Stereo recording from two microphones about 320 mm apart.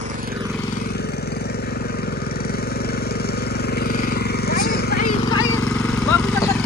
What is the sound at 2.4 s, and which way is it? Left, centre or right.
Vehicle, left.